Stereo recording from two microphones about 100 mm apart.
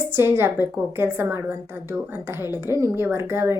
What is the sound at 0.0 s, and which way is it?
A woman's voice, 25° right (ahead or behind).